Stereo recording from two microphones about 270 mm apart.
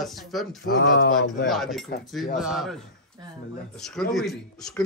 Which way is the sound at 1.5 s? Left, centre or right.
Centre.